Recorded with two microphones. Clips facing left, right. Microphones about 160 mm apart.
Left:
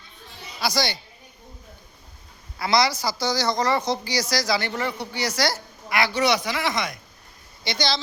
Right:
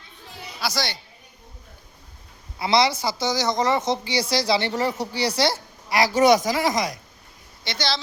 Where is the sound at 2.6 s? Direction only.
25° right (ahead or behind).